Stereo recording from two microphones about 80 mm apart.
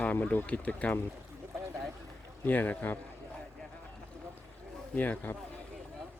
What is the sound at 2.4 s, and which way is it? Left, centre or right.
Speech, left.